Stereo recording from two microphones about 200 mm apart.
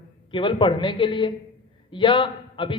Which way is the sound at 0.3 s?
25° left (ahead or behind).